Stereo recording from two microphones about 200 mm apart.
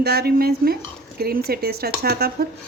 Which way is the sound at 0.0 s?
50° right (ahead or behind).